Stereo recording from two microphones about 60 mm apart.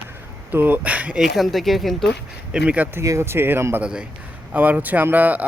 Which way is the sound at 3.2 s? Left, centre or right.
Right.